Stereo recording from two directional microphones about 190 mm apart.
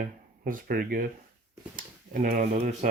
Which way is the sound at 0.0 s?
45° right (ahead or behind).